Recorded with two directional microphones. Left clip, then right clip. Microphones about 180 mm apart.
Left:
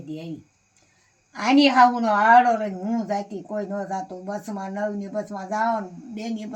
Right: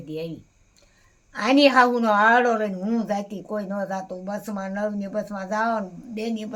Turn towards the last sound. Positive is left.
turn(degrees=-10)  # may be behind; listen again after turning